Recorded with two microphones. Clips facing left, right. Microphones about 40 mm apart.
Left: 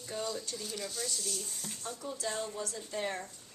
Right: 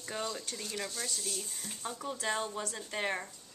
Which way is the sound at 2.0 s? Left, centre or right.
Right.